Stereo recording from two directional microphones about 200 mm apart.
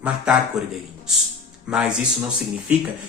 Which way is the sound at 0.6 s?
5° right (ahead or behind).